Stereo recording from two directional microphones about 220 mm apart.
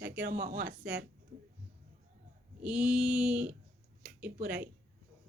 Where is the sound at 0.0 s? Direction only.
50° right (ahead or behind).